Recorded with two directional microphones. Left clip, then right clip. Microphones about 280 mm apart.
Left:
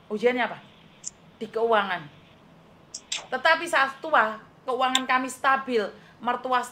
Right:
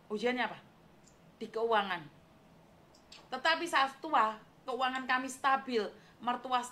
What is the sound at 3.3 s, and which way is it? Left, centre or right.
A woman's voice, right.